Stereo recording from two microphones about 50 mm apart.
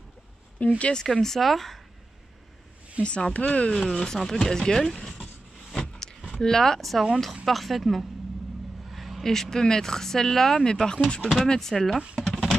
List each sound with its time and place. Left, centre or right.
0.6 s speech: left
0.9 s speech: centre
3.0 s speech: left
3.7 s speech: centre
5.7 s a sound: centre
6.4 s a woman's voice: centre